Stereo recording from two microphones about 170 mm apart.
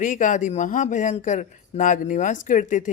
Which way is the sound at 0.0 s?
50° left (ahead or behind).